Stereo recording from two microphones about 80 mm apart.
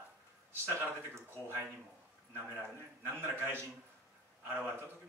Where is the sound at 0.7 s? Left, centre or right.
Right.